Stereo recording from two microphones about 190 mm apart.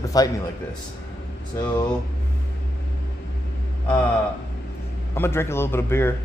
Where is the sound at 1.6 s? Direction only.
15° left (ahead or behind).